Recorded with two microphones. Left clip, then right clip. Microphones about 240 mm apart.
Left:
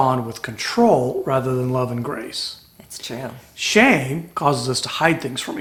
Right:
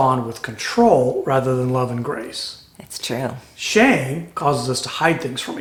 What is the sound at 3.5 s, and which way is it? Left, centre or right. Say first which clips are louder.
Speech: left 1 dB; left.